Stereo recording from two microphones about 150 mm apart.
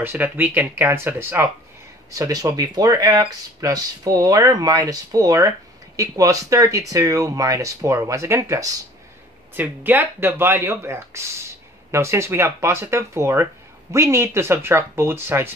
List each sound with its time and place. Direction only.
0.0 s speech: 10° right (ahead or behind)